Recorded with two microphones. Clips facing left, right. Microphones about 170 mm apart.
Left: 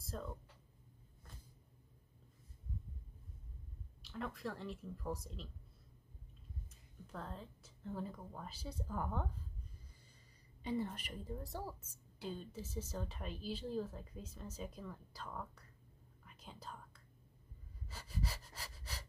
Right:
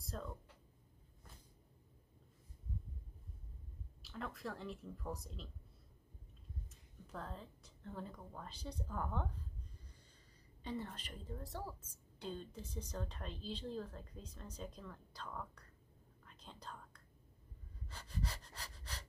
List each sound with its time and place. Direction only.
0.0 s a sound: centre (ahead or behind)
4.0 s a woman's voice: centre (ahead or behind)
7.1 s a woman's voice: centre (ahead or behind)
10.6 s a woman's voice: 10° left (ahead or behind)
16.3 s whispering: 10° left (ahead or behind)
17.8 s breathing: 5° left (ahead or behind)